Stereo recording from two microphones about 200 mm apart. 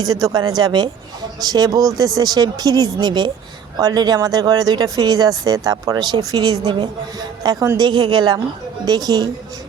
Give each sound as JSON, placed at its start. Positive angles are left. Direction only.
{"t": 0.3, "sound": "speech", "side_deg": -20}